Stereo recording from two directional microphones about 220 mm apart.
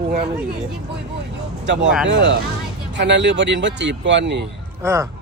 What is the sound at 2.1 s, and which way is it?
Speech, 55° right (ahead or behind).